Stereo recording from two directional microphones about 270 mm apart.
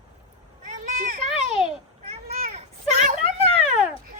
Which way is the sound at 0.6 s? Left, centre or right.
Right.